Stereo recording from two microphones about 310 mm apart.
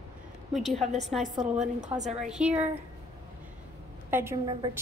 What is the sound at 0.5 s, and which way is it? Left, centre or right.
Speech, centre.